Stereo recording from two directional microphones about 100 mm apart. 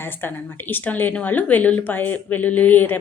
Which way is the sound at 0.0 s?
20° left (ahead or behind).